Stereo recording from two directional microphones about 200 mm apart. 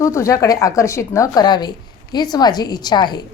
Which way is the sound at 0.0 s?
15° left (ahead or behind).